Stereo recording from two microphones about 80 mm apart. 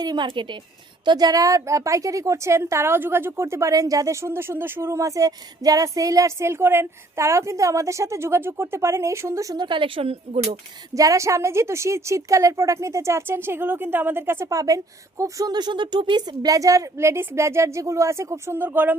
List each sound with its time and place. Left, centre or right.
0.0 s a woman's voice: right
1.0 s a woman's voice: right
9.6 s speech: right
10.9 s a woman's voice: right
14.5 s speech: right
15.5 s a woman's voice: right